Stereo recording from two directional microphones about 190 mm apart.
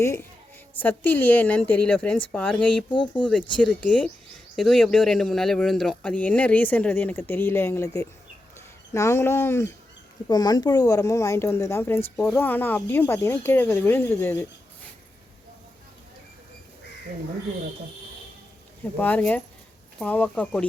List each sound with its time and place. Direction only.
0.0 s speech: 15° left (ahead or behind)
2.9 s speech: 25° left (ahead or behind)
3.6 s speech: 5° left (ahead or behind)
18.9 s speech: 10° left (ahead or behind)